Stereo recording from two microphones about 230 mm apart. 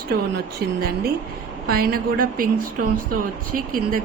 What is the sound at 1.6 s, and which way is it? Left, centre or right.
Speech, right.